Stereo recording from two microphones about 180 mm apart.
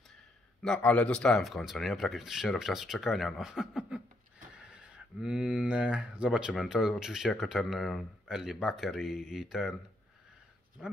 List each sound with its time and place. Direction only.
0.6 s speech: 5° left (ahead or behind)
10.8 s speech: 5° right (ahead or behind)